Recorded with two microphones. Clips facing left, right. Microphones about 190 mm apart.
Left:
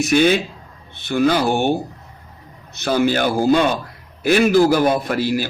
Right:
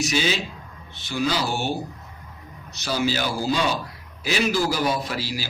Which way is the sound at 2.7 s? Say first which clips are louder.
Left 7 dB; 55° left (ahead or behind).